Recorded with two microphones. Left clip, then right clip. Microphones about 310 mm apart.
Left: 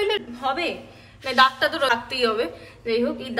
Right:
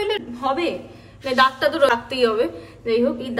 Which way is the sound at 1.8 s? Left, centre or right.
Left.